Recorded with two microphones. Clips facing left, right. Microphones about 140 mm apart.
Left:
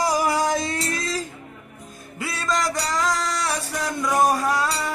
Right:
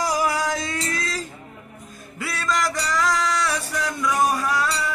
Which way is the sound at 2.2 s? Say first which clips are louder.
Even; 20° left (ahead or behind).